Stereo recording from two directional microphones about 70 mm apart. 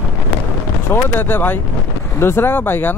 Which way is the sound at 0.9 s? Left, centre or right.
Left.